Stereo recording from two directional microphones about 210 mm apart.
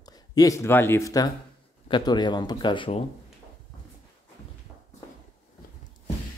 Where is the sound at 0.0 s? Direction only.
20° left (ahead or behind).